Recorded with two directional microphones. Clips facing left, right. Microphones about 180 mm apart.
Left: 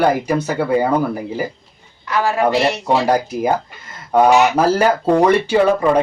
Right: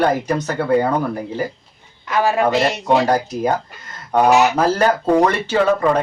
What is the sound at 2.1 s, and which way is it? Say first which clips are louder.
Speech: even; 20° right (ahead or behind).